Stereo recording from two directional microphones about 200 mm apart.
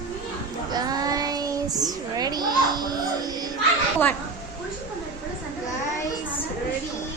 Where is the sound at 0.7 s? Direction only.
20° right (ahead or behind).